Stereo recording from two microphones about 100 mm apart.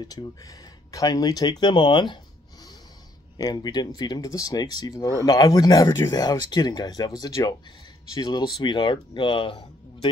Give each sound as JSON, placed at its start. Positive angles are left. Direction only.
{"t": 0.0, "sound": "speech", "side_deg": 40}
{"t": 3.3, "sound": "speech", "side_deg": 40}